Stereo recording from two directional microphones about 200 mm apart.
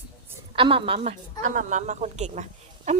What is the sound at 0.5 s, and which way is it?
A woman's voice, 25° right (ahead or behind).